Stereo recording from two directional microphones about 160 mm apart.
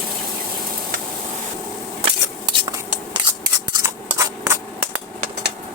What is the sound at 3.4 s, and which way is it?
Scissors, 20° right (ahead or behind).